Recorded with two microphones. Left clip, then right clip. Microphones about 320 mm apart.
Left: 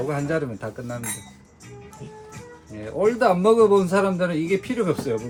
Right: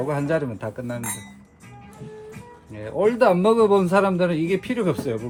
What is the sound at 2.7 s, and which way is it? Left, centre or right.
A man's voice, centre.